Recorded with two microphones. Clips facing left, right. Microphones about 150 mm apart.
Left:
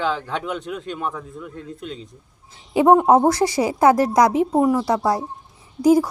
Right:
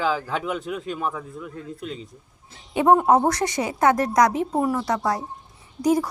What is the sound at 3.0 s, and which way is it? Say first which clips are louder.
Speech: left 4 dB; 25° left (ahead or behind).